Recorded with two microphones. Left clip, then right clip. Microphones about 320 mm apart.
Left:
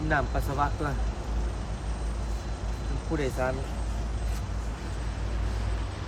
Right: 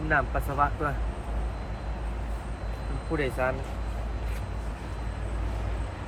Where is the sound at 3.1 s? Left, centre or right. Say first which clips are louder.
Right 1 dB; centre.